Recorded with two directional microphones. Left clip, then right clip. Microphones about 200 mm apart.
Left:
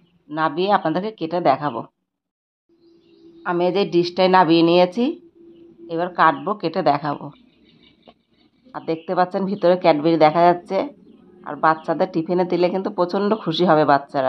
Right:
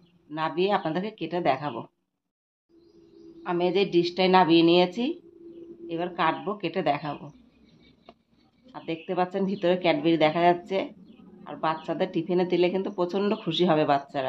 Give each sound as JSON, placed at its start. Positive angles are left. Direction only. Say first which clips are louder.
{"t": 0.3, "sound": "speech", "louder": "left 7 dB", "side_deg": 30}
{"t": 3.4, "sound": "speech", "louder": "left 5 dB", "side_deg": 35}
{"t": 8.7, "sound": "speech", "louder": "left 8 dB", "side_deg": 30}